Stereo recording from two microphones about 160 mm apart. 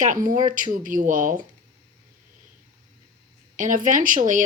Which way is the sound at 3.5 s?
55° right (ahead or behind).